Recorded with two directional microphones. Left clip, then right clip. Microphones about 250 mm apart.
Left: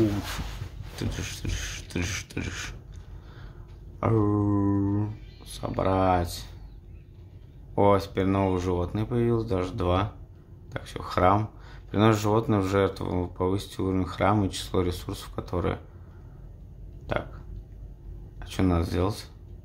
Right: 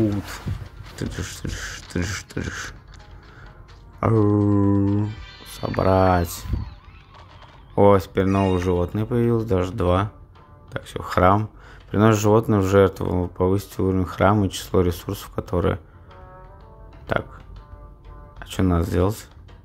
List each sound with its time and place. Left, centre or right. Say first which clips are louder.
0.9 s speech: right 3 dB; centre
4.0 s speech: right 6 dB; centre
7.7 s speech: right 6 dB; centre
17.1 s speech: right 6 dB; centre
18.4 s speech: right 4 dB; centre